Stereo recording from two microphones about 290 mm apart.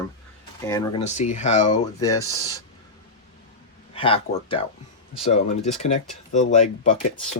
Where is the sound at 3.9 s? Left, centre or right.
Centre.